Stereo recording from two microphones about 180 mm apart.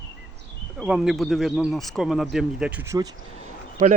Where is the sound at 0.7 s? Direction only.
5° right (ahead or behind).